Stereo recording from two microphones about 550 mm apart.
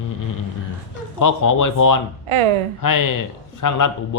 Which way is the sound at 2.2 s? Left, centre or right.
Right.